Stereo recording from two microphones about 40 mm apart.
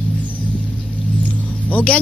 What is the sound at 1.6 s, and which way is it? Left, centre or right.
Vehicle, left.